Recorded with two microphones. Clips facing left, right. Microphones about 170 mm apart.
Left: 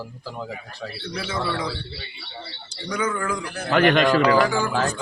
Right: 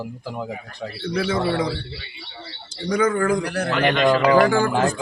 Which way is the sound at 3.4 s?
75° right (ahead or behind).